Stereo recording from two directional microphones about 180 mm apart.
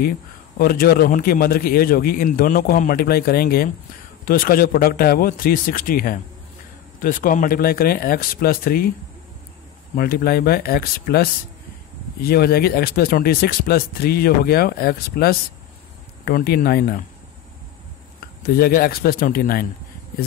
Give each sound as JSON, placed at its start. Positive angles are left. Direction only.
{"t": 0.6, "sound": "a man's voice", "side_deg": 55}
{"t": 9.9, "sound": "speech", "side_deg": 55}
{"t": 18.2, "sound": "speech", "side_deg": 55}